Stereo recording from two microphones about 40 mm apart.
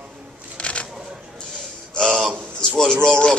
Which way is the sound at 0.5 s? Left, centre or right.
Left.